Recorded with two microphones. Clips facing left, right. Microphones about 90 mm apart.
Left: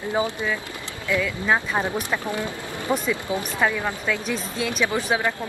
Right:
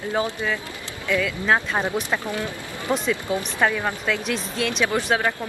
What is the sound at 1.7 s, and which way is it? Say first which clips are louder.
Speech: right 1 dB; 20° right (ahead or behind).